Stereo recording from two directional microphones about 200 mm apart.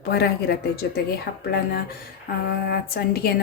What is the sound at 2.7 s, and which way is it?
Speech, 50° left (ahead or behind).